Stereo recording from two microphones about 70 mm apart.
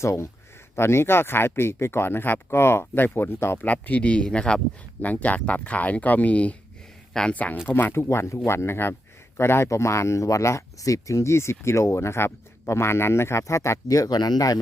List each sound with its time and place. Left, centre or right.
0.0 s speech: left
3.7 s speech: left
7.3 s speech: left
7.9 s speech: left